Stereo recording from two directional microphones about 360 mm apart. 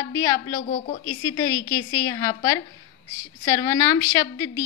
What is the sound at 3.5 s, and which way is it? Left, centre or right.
Speech, centre.